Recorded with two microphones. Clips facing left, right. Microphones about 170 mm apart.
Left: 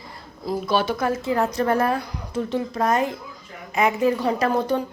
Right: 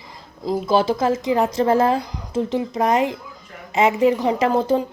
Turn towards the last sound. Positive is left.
turn(degrees=-25)  # may be behind; listen again after turning